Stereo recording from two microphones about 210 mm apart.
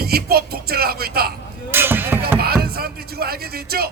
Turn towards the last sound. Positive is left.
turn(degrees=-45)  # may be behind; listen again after turning